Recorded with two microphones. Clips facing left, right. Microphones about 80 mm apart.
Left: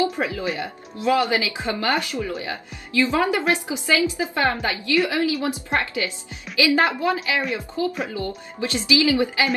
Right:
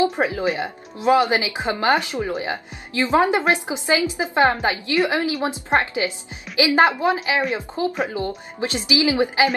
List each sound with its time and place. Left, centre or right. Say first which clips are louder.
0.0 s a woman's voice: right 3 dB; right